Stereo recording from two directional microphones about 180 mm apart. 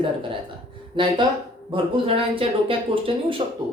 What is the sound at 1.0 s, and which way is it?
Speech, 25° right (ahead or behind).